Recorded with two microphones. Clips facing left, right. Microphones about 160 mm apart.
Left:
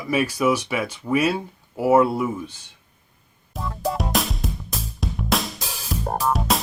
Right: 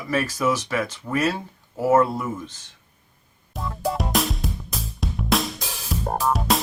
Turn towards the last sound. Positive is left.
turn(degrees=0)  # may be behind; listen again after turning